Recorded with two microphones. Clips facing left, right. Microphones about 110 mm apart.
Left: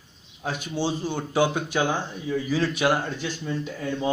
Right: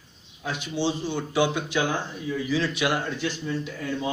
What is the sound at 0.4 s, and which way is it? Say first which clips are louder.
Speech: even; 45° left (ahead or behind).